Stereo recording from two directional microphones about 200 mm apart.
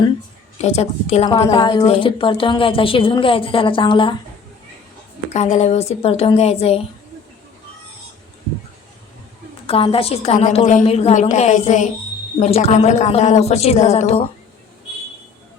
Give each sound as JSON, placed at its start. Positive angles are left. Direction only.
{"t": 0.6, "sound": "a woman's voice", "side_deg": 35}
{"t": 1.4, "sound": "a woman's voice", "side_deg": 20}
{"t": 5.3, "sound": "a woman's voice", "side_deg": 35}
{"t": 9.6, "sound": "a woman's voice", "side_deg": 30}